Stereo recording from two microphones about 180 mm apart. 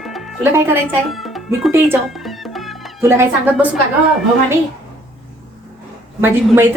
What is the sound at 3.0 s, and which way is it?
Speech, 15° right (ahead or behind).